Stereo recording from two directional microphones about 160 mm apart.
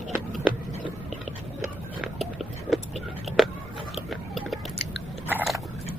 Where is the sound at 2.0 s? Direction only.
Centre (ahead or behind).